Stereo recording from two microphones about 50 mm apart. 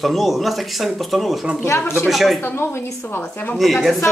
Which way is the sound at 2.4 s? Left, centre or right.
Left.